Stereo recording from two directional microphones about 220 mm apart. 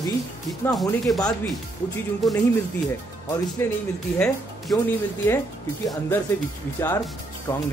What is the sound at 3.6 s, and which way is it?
Speech, 10° left (ahead or behind).